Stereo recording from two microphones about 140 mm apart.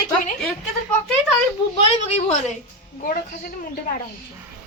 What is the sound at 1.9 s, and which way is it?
Speech, 50° left (ahead or behind).